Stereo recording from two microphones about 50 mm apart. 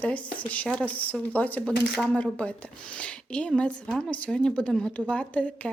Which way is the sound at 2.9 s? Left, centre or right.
Left.